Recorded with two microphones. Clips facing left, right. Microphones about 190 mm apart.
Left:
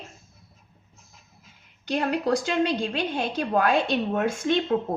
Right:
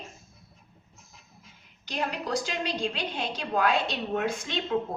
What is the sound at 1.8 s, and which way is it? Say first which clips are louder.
A woman's voice: left 7 dB; 55° left (ahead or behind).